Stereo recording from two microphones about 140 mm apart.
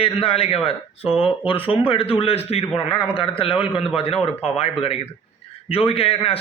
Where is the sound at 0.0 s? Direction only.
45° left (ahead or behind).